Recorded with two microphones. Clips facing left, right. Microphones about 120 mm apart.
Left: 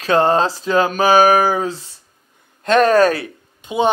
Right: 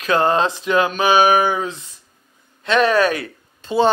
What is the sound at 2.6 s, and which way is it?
Speech, 45° left (ahead or behind).